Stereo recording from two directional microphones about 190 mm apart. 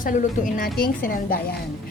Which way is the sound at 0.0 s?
45° left (ahead or behind).